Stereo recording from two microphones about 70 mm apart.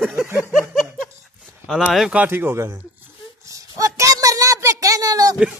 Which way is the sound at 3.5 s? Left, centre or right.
Right.